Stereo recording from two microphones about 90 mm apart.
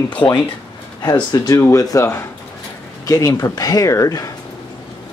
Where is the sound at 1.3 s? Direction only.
45° left (ahead or behind).